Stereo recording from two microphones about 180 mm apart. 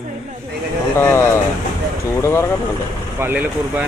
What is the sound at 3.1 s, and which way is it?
Speech, 10° right (ahead or behind).